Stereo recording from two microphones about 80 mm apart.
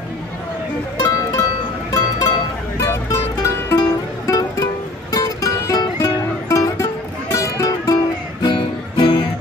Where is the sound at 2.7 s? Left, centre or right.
Left.